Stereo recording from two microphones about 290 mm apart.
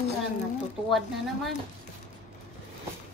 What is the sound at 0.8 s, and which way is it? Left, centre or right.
Speech, centre.